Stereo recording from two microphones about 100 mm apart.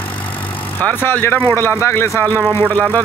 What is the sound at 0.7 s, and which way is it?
Speech, 20° left (ahead or behind).